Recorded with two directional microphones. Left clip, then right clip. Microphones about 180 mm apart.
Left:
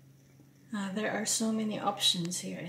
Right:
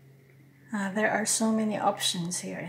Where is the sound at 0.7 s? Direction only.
20° right (ahead or behind).